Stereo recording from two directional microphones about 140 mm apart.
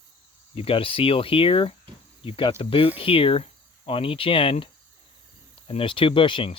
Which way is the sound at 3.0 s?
40° left (ahead or behind).